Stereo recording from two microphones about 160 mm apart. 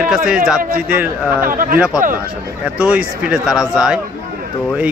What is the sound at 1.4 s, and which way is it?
Speech, 60° right (ahead or behind).